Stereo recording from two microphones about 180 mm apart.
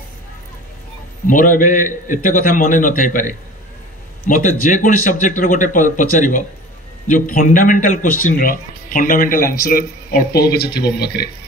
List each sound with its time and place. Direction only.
1.2 s a man's voice: 45° left (ahead or behind)